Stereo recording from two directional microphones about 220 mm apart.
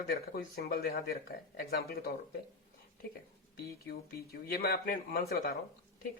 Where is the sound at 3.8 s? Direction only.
45° left (ahead or behind).